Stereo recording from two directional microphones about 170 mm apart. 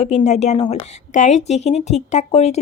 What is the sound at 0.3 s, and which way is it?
Speech, 40° left (ahead or behind).